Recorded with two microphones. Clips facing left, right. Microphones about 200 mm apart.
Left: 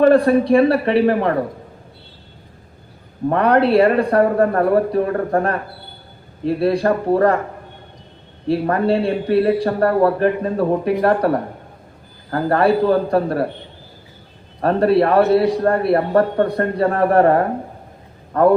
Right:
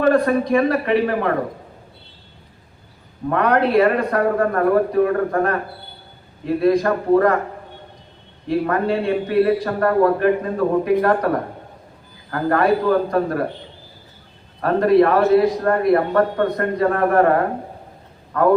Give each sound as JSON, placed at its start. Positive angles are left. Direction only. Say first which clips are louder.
{"t": 0.0, "sound": "a man's voice", "louder": "left 4 dB", "side_deg": 30}
{"t": 3.2, "sound": "a man's voice", "louder": "left 3 dB", "side_deg": 30}
{"t": 8.4, "sound": "a man's voice", "louder": "left 2 dB", "side_deg": 30}
{"t": 14.6, "sound": "a man's voice", "louder": "even", "side_deg": 30}
{"t": 18.3, "sound": "a man's voice", "louder": "left 3 dB", "side_deg": 30}